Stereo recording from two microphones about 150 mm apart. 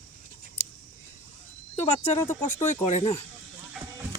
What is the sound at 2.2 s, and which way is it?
Speech, 15° left (ahead or behind).